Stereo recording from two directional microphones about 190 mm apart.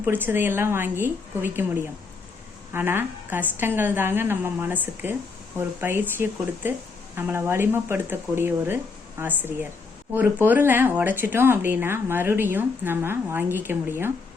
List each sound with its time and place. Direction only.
0.0 s speech: 10° right (ahead or behind)